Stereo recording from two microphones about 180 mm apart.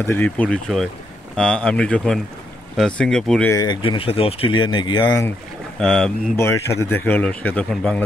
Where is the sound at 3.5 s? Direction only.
25° left (ahead or behind).